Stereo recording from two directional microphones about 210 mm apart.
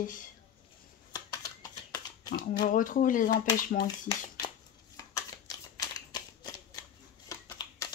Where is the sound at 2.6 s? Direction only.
40° left (ahead or behind).